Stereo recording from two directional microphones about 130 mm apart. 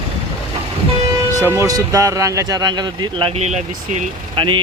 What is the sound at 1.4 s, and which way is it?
Speech, 20° right (ahead or behind).